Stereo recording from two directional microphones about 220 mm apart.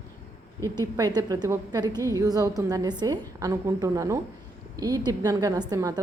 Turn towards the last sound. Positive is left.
turn(degrees=-15)  # may be behind; listen again after turning